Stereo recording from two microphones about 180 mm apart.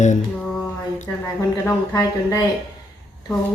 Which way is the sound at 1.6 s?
20° left (ahead or behind).